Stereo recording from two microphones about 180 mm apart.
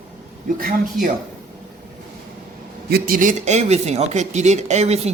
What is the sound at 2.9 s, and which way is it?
Speech, 55° right (ahead or behind).